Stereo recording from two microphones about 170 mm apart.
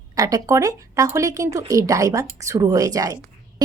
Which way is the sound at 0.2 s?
20° right (ahead or behind).